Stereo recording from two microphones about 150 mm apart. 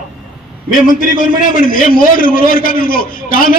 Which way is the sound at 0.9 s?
60° left (ahead or behind).